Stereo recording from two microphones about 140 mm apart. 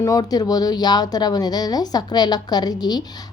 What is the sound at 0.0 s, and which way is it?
A woman's voice, 25° left (ahead or behind).